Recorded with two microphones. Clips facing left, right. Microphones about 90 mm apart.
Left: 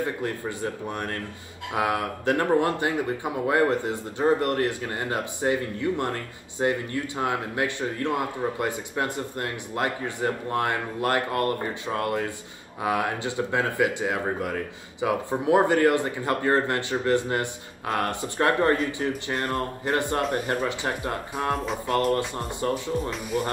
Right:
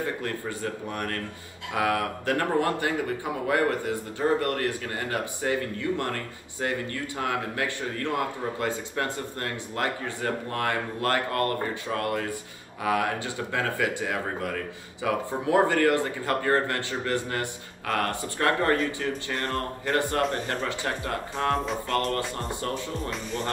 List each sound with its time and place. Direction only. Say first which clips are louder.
0.0 s speech: left 2 dB; 20° left (ahead or behind)
23.0 s speech: left 3 dB; 10° left (ahead or behind)